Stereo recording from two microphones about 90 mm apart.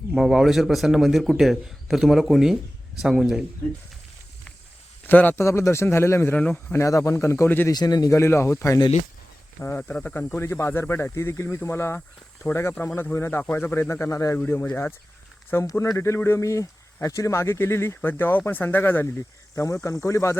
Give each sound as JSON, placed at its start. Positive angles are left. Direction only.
{"t": 0.1, "sound": "a man's voice", "side_deg": -5}
{"t": 5.0, "sound": "speech", "side_deg": 20}
{"t": 5.5, "sound": "speech", "side_deg": 30}
{"t": 6.3, "sound": "speech", "side_deg": 15}
{"t": 6.7, "sound": "a man's voice", "side_deg": 35}
{"t": 7.7, "sound": "a man's voice", "side_deg": 50}
{"t": 8.2, "sound": "a man's voice", "side_deg": 30}
{"t": 9.6, "sound": "speech", "side_deg": 20}
{"t": 9.8, "sound": "speech", "side_deg": 10}
{"t": 10.3, "sound": "speech", "side_deg": 25}
{"t": 11.9, "sound": "speech", "side_deg": 10}
{"t": 12.8, "sound": "speech", "side_deg": 30}
{"t": 14.3, "sound": "a man's voice", "side_deg": 20}